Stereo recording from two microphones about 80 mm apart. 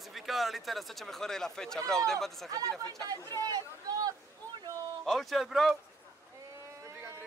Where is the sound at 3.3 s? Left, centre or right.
Right.